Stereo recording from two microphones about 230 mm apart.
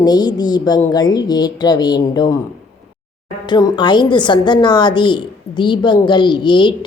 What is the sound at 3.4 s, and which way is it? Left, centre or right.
A woman's voice, centre.